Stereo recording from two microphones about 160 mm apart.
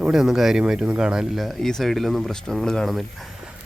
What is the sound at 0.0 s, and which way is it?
Speech, 5° right (ahead or behind).